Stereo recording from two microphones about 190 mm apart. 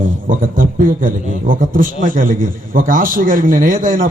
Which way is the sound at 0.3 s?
45° right (ahead or behind).